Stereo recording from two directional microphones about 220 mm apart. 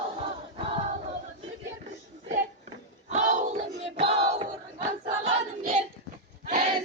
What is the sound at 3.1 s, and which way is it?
Battle cry, 35° right (ahead or behind).